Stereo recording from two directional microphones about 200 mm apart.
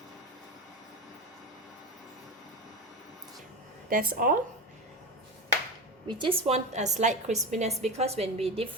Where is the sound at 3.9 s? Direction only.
45° right (ahead or behind).